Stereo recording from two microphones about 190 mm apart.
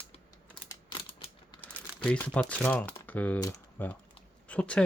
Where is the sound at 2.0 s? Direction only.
5° left (ahead or behind).